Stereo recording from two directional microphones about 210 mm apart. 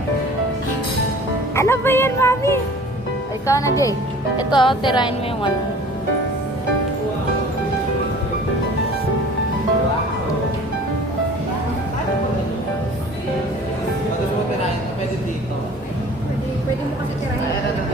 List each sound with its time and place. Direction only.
1.5 s music: 10° left (ahead or behind)
3.4 s a woman's voice: 15° left (ahead or behind)